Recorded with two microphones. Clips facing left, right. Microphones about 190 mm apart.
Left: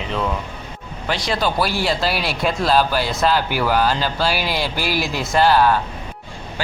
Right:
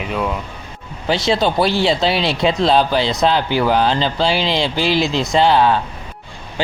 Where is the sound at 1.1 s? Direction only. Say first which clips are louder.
Right 5 dB; 25° right (ahead or behind).